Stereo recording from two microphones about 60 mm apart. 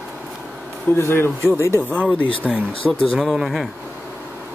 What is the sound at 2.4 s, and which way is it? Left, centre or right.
Speech, centre.